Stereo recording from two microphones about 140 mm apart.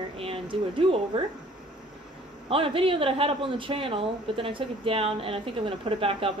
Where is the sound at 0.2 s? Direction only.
40° right (ahead or behind).